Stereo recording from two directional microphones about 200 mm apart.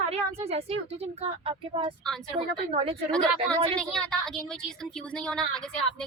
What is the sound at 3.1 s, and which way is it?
Speech, 5° left (ahead or behind).